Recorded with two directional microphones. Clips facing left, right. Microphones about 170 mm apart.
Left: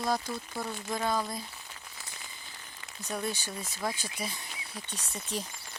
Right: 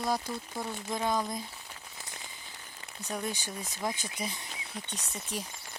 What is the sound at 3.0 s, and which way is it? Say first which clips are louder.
Speech: left 1 dB; 15° right (ahead or behind).